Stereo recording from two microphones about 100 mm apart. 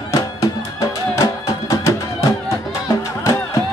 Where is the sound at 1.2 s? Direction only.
35° left (ahead or behind).